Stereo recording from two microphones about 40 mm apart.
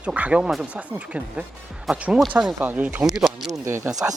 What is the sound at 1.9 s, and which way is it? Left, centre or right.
Speech, centre.